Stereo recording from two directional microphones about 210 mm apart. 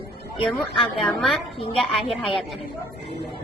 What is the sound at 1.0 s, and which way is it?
Speech, centre (ahead or behind).